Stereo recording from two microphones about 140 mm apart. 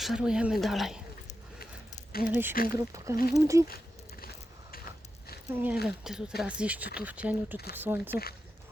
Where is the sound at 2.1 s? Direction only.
90° left.